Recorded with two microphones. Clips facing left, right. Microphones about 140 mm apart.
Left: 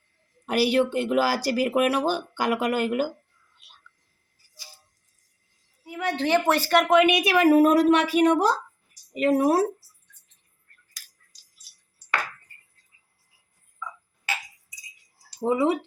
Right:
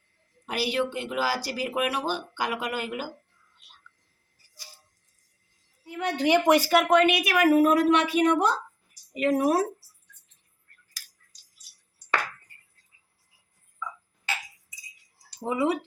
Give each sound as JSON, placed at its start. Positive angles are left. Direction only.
{"t": 0.4, "sound": "speech", "side_deg": 45}
{"t": 6.1, "sound": "speech", "side_deg": -15}
{"t": 7.0, "sound": "speech", "side_deg": 20}
{"t": 15.4, "sound": "speech", "side_deg": 30}